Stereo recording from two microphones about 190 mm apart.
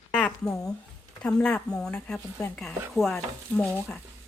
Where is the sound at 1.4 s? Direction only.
5° left (ahead or behind).